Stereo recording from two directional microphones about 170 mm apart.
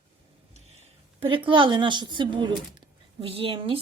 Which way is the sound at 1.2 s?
30° right (ahead or behind).